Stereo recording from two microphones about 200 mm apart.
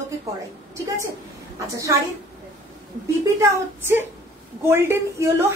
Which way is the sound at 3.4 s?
10° right (ahead or behind).